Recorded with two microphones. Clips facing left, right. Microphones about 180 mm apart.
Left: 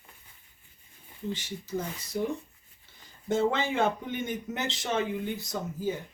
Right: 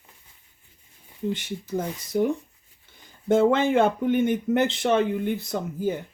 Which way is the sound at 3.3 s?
55° right (ahead or behind).